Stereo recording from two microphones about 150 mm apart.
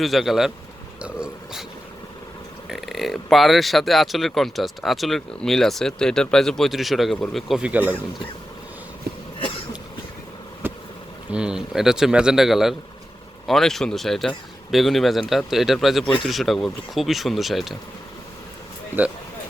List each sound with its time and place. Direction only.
0.0 s speech: centre (ahead or behind)
1.0 s a sound: 5° right (ahead or behind)
2.6 s speech: centre (ahead or behind)
9.1 s cough: 90° right
10.6 s vehicle: 15° right (ahead or behind)
11.3 s speech: 5° right (ahead or behind)